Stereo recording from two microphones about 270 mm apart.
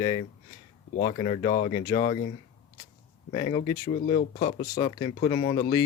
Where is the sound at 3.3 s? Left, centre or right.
Centre.